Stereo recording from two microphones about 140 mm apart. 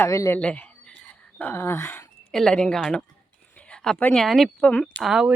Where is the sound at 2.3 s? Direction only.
5° left (ahead or behind).